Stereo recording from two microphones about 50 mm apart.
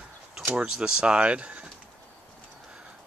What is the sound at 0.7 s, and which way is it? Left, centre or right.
Speech, centre.